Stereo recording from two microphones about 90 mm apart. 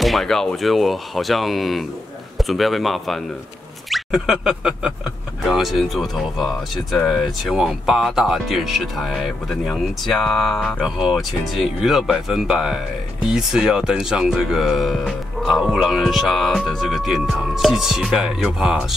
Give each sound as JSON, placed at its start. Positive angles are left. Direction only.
{"t": 0.0, "sound": "speech", "side_deg": 0}
{"t": 10.8, "sound": "speech", "side_deg": -5}